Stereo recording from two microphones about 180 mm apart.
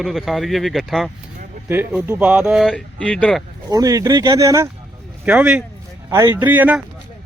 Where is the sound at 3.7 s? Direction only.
20° right (ahead or behind).